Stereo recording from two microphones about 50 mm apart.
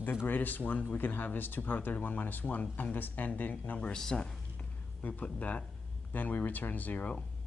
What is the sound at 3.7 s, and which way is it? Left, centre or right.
Speech, left.